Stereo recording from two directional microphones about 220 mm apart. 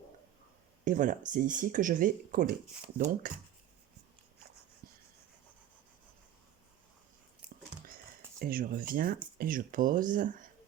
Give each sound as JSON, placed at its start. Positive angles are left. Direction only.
{"t": 0.9, "sound": "speech", "side_deg": -35}
{"t": 8.4, "sound": "speech", "side_deg": -40}